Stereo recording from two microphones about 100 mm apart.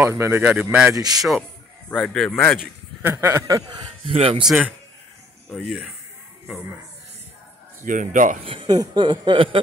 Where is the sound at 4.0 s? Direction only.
75° right (ahead or behind).